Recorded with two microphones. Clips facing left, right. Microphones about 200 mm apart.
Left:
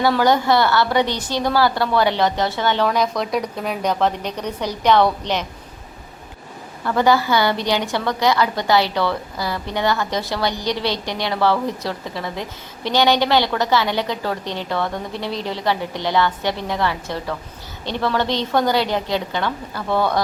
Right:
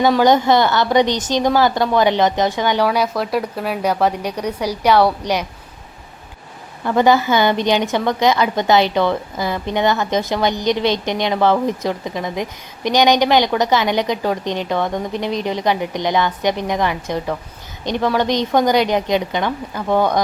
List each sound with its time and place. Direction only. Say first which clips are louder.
0.0 s a woman's voice: right 3 dB; 20° right (ahead or behind)
6.8 s a woman's voice: right 3 dB; 20° right (ahead or behind)